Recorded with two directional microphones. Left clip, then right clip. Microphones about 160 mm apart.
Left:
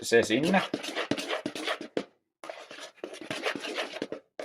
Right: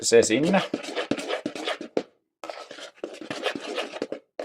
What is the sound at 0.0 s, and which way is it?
Speech, 40° right (ahead or behind).